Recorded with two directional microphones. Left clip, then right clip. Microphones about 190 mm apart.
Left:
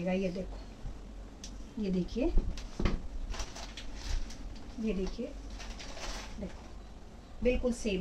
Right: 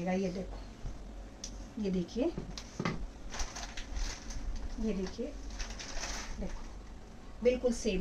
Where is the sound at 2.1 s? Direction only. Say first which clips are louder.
Even; 20° left (ahead or behind).